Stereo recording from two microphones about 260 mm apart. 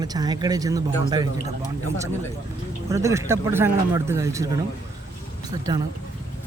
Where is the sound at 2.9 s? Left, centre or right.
Centre.